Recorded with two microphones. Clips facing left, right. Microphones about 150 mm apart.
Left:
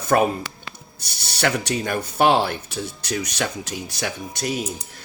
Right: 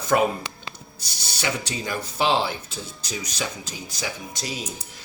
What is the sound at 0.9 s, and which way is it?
Speech, 65° left (ahead or behind).